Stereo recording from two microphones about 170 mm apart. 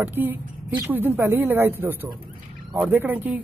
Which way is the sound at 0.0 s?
10° right (ahead or behind).